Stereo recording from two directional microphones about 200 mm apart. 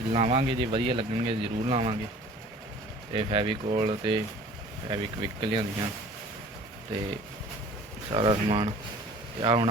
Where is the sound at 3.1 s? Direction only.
25° right (ahead or behind).